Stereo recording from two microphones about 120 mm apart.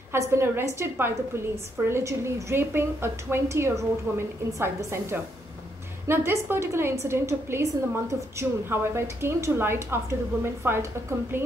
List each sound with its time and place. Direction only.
0.1 s a woman's voice: 20° right (ahead or behind)